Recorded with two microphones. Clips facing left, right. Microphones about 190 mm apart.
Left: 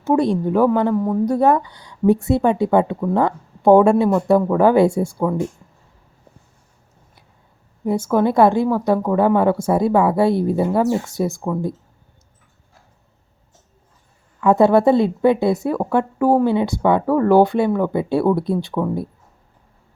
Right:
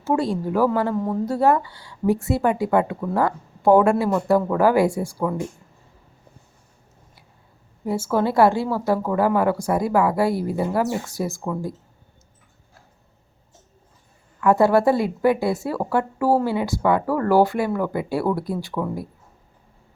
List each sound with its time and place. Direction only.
0.0 s a woman's voice: 20° left (ahead or behind)
7.9 s a woman's voice: 15° left (ahead or behind)
14.4 s a woman's voice: 20° left (ahead or behind)